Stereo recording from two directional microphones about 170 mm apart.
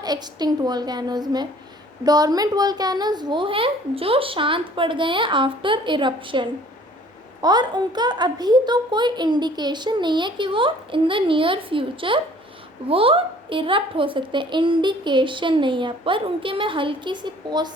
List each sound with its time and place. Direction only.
0.0 s a child's voice: 25° right (ahead or behind)